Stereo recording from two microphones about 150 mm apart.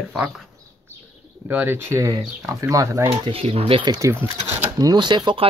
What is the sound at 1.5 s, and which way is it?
Speech, 15° right (ahead or behind).